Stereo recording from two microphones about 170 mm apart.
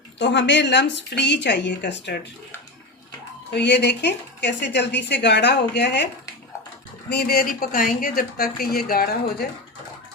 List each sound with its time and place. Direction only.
0.2 s a woman's voice: 90° left
3.5 s a woman's voice: 90° left
7.1 s speech: 65° left (ahead or behind)